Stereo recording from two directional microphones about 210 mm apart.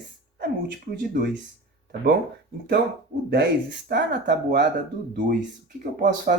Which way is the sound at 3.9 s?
55° right (ahead or behind).